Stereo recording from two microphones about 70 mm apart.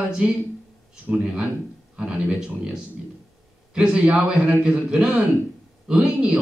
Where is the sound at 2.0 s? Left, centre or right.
Centre.